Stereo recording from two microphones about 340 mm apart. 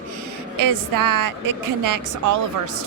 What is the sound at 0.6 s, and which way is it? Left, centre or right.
Speech, right.